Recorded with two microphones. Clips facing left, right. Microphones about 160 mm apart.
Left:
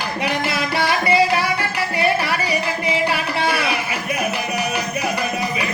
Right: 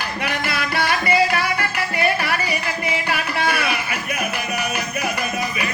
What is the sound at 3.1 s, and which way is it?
Music, 30° left (ahead or behind).